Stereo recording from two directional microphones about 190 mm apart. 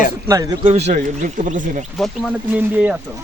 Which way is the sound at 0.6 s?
35° right (ahead or behind).